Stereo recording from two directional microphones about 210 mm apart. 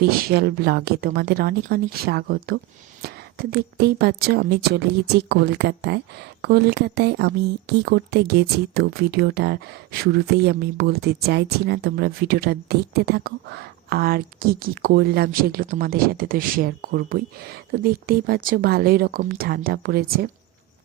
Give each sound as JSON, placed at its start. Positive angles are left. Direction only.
{"t": 0.2, "sound": "speech", "side_deg": -45}